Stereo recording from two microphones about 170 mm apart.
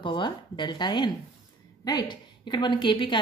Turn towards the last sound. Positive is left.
turn(degrees=30)  # may be behind; listen again after turning